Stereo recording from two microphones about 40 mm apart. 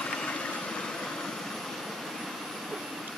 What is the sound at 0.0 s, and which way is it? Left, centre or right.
Vehicle, left.